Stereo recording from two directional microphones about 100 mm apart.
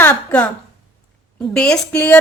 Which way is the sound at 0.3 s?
15° left (ahead or behind).